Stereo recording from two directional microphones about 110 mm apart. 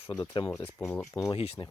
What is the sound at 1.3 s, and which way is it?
Speech, 60° left (ahead or behind).